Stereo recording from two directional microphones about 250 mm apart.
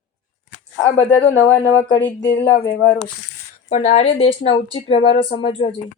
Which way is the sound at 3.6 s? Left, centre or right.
Left.